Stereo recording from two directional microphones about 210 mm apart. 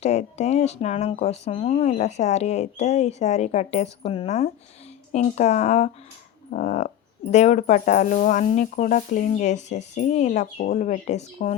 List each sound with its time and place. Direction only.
0.0 s speech: 30° left (ahead or behind)